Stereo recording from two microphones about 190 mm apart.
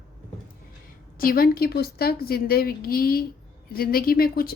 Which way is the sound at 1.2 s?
50° left (ahead or behind).